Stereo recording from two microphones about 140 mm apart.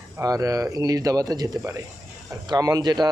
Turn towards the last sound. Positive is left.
turn(degrees=-30)  # may be behind; listen again after turning